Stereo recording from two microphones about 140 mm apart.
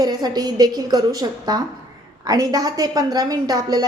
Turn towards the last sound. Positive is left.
turn(degrees=-30)  # may be behind; listen again after turning